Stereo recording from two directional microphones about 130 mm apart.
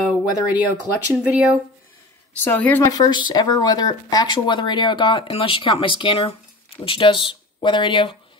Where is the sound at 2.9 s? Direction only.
35° left (ahead or behind).